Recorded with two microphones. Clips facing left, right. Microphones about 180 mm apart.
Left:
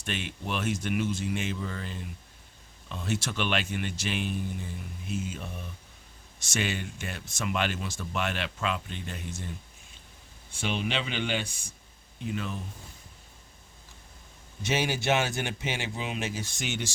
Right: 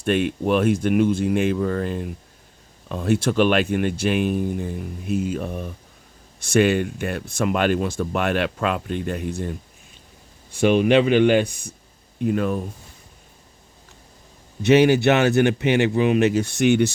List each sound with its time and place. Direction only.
0.0 s speech: 55° right (ahead or behind)
10.6 s speech: 55° right (ahead or behind)
14.6 s speech: 60° right (ahead or behind)